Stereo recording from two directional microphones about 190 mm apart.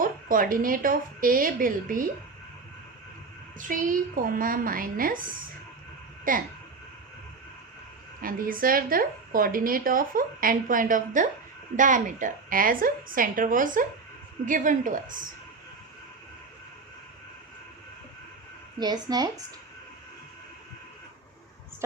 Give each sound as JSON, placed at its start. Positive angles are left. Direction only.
{"t": 0.0, "sound": "a woman's voice", "side_deg": -45}
{"t": 3.6, "sound": "a woman's voice", "side_deg": -45}
{"t": 6.3, "sound": "a woman's voice", "side_deg": -45}
{"t": 8.2, "sound": "a woman's voice", "side_deg": -50}
{"t": 18.8, "sound": "speech", "side_deg": -20}